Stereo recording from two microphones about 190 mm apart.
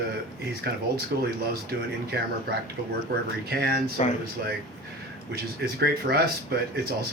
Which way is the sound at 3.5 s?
55° right (ahead or behind).